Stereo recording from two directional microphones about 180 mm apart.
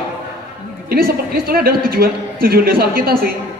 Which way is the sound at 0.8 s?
55° right (ahead or behind).